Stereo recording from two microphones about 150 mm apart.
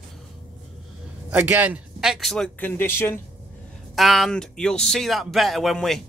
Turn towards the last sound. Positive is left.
turn(degrees=0)  # may be behind; listen again after turning